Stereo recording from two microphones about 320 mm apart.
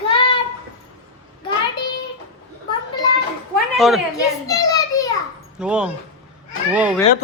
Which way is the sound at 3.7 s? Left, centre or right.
Centre.